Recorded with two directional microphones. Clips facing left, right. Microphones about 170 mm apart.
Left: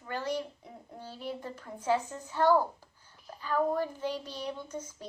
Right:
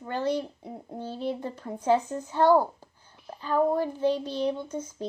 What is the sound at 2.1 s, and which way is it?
Speech, 20° right (ahead or behind).